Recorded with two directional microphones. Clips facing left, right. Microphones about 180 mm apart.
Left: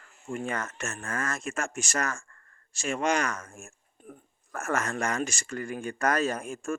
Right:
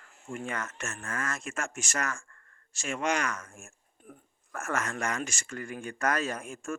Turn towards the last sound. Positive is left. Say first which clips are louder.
# left 5 dB
turn(degrees=35)  # may be behind; listen again after turning